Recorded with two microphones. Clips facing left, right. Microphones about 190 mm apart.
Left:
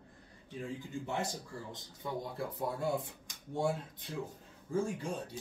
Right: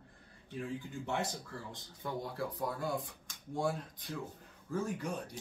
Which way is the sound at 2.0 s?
20° left (ahead or behind).